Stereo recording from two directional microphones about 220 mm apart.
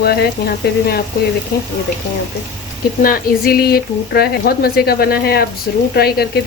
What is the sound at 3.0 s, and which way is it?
Speech, 45° left (ahead or behind).